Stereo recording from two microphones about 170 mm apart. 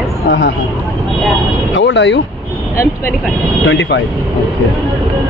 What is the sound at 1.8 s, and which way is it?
Speech, 90° left.